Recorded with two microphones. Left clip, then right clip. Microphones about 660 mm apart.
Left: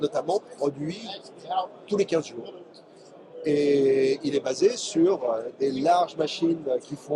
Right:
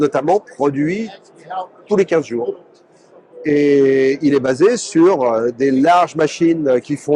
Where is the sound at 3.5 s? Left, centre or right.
Right.